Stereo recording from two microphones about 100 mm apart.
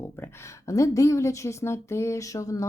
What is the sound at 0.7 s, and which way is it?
Speech, 30° left (ahead or behind).